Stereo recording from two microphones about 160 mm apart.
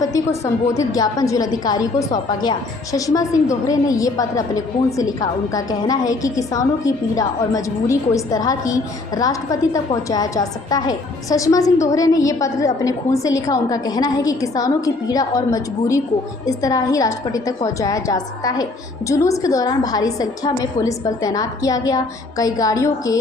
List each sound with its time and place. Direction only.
0.0 s a woman's voice: 20° left (ahead or behind)